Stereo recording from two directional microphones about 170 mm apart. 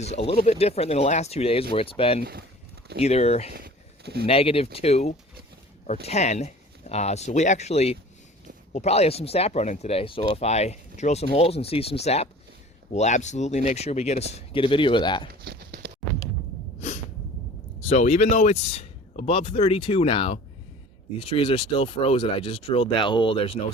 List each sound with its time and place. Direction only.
0.0 s speech: 40° left (ahead or behind)
3.5 s a sound: 65° right (ahead or behind)
4.3 s speech: 35° left (ahead or behind)
15.3 s clip-clop: 70° right (ahead or behind)
17.8 s speech: 40° left (ahead or behind)